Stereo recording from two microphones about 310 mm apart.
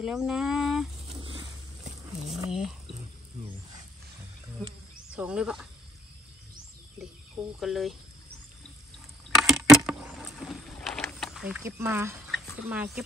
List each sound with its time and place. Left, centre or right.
0.0 s speech: centre
1.0 s a sound: centre
2.3 s speech: centre
5.1 s speech: centre
7.6 s speech: centre
9.3 s vehicle: centre
12.6 s speech: centre